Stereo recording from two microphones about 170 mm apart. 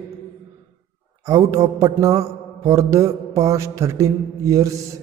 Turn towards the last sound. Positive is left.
turn(degrees=-20)  # may be behind; listen again after turning